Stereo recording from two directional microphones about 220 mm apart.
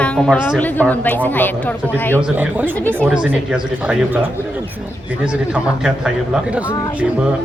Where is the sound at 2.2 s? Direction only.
10° right (ahead or behind).